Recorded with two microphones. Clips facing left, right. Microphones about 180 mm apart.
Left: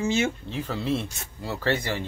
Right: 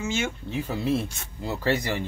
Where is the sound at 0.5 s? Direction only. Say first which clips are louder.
Right 2 dB; 10° right (ahead or behind).